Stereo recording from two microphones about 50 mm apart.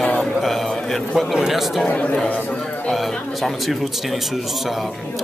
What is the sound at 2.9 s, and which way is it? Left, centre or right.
A man's voice, centre.